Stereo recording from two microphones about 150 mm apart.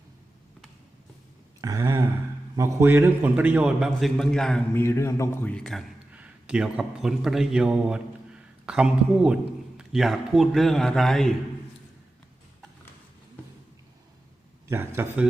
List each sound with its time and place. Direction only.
1.6 s a sound: 25° right (ahead or behind)
2.6 s a man's voice: 20° right (ahead or behind); by 4.6 s 5° left (ahead or behind)
4.7 s a man's voice: 15° left (ahead or behind)
6.1 s a man's voice: 10° right (ahead or behind)
14.7 s a man's voice: 15° right (ahead or behind)